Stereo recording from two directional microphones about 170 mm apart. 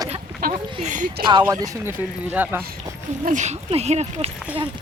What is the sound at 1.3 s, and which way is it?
Speech, 25° right (ahead or behind).